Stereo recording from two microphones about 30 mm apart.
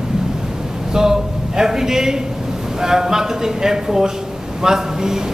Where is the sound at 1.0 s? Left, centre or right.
Right.